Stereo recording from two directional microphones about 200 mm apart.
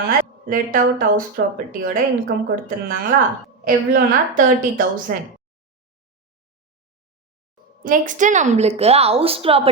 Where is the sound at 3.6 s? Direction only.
45° right (ahead or behind).